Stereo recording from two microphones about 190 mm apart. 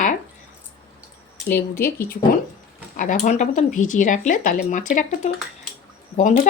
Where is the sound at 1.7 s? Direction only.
50° left (ahead or behind).